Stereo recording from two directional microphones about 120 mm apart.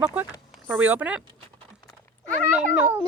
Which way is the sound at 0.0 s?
15° right (ahead or behind).